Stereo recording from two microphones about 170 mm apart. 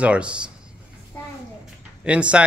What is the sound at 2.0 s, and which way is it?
Speech, 5° right (ahead or behind).